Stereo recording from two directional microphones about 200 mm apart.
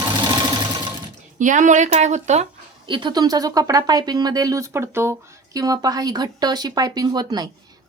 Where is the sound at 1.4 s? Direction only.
40° right (ahead or behind).